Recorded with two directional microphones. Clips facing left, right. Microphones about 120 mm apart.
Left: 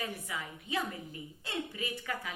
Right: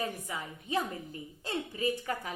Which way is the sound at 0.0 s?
35° right (ahead or behind).